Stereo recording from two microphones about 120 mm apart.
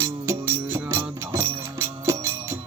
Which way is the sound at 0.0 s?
20° right (ahead or behind).